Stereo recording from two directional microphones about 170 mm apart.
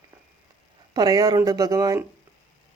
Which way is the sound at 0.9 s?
20° right (ahead or behind).